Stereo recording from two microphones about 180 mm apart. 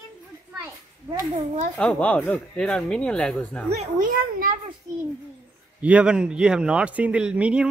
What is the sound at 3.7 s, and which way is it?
Speech, 45° right (ahead or behind).